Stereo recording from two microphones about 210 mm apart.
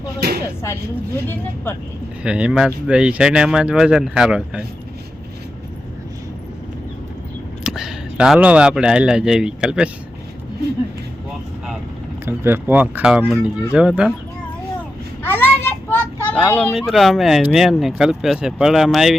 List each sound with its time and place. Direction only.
0.2 s speech: 50° right (ahead or behind)
0.6 s speech: 10° left (ahead or behind)
2.2 s speech: 5° right (ahead or behind)
7.6 s speech: centre (ahead or behind)
12.2 s speech: 10° right (ahead or behind)
15.2 s a sound: 10° left (ahead or behind)
15.9 s speech: 10° left (ahead or behind)